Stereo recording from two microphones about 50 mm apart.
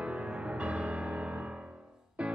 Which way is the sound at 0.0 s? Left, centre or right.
Right.